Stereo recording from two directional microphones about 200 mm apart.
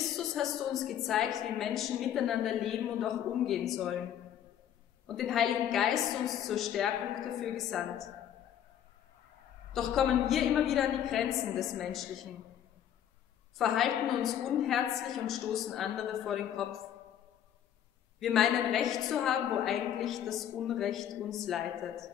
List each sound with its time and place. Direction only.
0.1 s a woman's voice: centre (ahead or behind)
5.0 s a woman's voice: centre (ahead or behind)
9.7 s a woman's voice: centre (ahead or behind)
13.6 s a woman's voice: centre (ahead or behind)
18.2 s a woman's voice: centre (ahead or behind)